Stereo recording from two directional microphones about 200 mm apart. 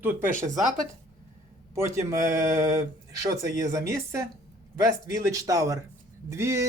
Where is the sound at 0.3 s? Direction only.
40° right (ahead or behind).